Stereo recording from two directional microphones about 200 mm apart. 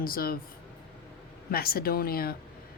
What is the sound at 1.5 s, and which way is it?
Speech, 50° left (ahead or behind).